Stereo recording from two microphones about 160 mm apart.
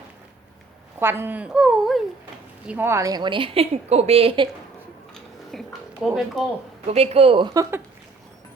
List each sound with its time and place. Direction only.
0.9 s speech: 15° right (ahead or behind)
2.6 s a woman's voice: 15° right (ahead or behind); by 4.4 s 35° right (ahead or behind)
5.1 s a sound: centre (ahead or behind)
6.8 s a woman's voice: 40° right (ahead or behind); by 7.8 s 20° right (ahead or behind)